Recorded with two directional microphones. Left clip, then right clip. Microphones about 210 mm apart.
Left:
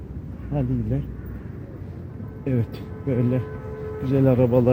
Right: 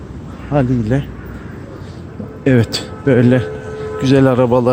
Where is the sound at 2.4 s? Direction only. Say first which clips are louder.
Right 14 dB; 45° right (ahead or behind).